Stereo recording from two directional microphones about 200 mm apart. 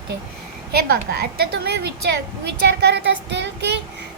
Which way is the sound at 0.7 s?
50° right (ahead or behind).